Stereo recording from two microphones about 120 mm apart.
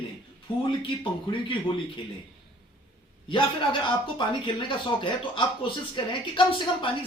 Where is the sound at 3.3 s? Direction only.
40° left (ahead or behind).